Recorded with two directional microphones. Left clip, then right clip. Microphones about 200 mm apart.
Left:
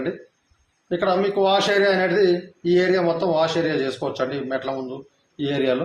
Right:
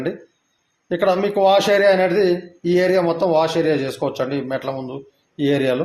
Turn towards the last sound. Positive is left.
turn(degrees=-50)  # may be behind; listen again after turning